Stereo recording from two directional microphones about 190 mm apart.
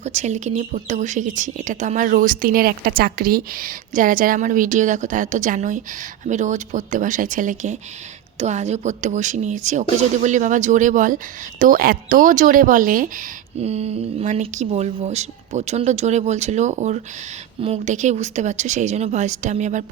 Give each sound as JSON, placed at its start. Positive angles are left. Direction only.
{"t": 0.0, "sound": "speech", "side_deg": -35}